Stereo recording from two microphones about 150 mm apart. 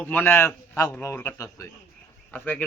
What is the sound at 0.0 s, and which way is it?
A man's voice, 10° left (ahead or behind).